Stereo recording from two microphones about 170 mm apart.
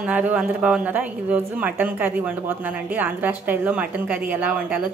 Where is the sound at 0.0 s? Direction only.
10° right (ahead or behind).